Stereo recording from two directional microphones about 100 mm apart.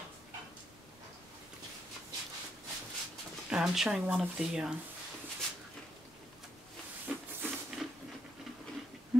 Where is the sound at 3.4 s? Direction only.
5° right (ahead or behind).